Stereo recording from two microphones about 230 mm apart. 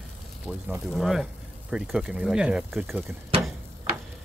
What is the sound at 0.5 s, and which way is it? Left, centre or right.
Speech, centre.